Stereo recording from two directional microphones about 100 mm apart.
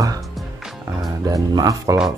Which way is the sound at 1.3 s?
35° right (ahead or behind).